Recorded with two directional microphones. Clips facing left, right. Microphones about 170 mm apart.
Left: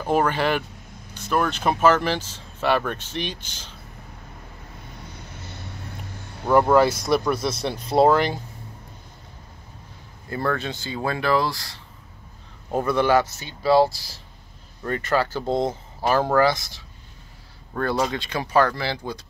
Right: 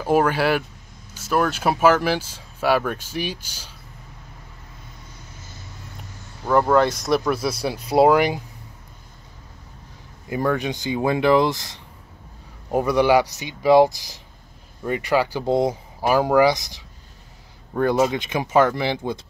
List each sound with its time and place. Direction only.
0.0 s speech: 10° right (ahead or behind)
5.4 s vehicle: 65° left (ahead or behind)
6.4 s speech: 5° left (ahead or behind); by 8.4 s 10° right (ahead or behind)
10.3 s speech: 15° right (ahead or behind)